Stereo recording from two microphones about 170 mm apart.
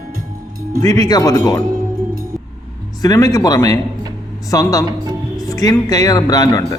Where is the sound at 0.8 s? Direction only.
20° left (ahead or behind).